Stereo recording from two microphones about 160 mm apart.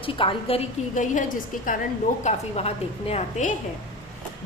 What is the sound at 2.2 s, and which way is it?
A woman's voice, 40° left (ahead or behind).